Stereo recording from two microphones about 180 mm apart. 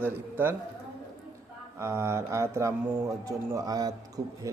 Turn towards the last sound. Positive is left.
turn(degrees=-20)  # may be behind; listen again after turning